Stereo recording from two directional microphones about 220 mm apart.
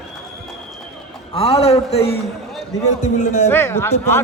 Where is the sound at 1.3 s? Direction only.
25° left (ahead or behind).